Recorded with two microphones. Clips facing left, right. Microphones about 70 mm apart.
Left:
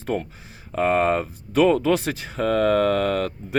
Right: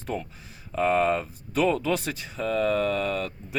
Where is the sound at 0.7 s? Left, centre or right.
Left.